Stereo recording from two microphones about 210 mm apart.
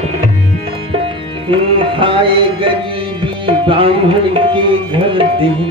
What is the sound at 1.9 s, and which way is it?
Music, 25° right (ahead or behind).